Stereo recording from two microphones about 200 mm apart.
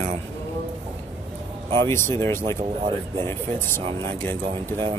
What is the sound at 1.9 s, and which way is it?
Speech, 10° left (ahead or behind).